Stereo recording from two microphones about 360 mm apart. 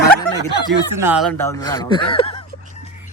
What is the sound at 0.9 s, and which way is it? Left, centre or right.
Speech, centre.